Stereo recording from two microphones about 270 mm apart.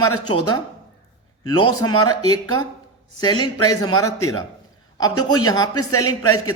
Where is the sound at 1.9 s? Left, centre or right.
Left.